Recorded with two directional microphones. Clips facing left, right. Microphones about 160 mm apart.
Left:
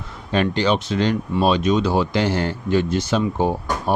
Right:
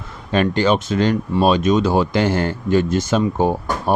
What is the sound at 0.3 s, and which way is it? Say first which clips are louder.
Speech: right 3 dB; 50° right (ahead or behind).